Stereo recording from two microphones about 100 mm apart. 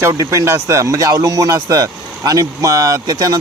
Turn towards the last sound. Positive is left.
turn(degrees=-40)  # may be behind; listen again after turning